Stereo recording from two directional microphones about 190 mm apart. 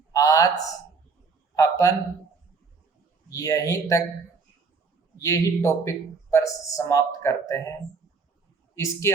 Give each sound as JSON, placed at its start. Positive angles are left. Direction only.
{"t": 0.1, "sound": "a sound", "side_deg": 20}
{"t": 1.5, "sound": "a man's voice", "side_deg": 15}
{"t": 3.2, "sound": "speech", "side_deg": 15}
{"t": 5.2, "sound": "speech", "side_deg": 15}
{"t": 8.7, "sound": "speech", "side_deg": 15}